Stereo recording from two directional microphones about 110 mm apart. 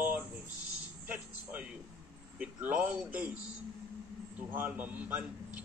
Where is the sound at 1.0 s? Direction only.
10° right (ahead or behind).